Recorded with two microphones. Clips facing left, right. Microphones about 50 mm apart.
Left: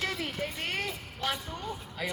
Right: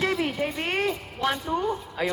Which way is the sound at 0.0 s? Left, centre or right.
Right.